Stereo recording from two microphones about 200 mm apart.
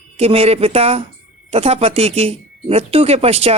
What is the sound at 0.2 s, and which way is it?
A woman's voice, 30° right (ahead or behind).